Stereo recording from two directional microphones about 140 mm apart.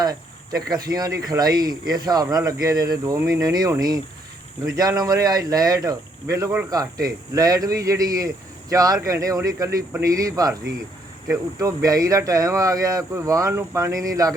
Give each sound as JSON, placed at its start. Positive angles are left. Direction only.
{"t": 0.7, "sound": "speech", "side_deg": -25}
{"t": 11.6, "sound": "speech", "side_deg": -25}